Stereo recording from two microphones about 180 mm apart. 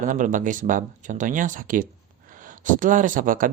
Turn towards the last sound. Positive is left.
turn(degrees=-50)  # may be behind; listen again after turning